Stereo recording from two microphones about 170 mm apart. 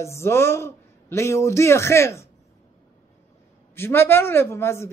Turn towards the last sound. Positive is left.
turn(degrees=15)  # may be behind; listen again after turning